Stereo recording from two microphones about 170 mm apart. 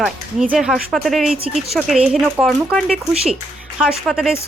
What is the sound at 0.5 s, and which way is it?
Speech, 5° right (ahead or behind).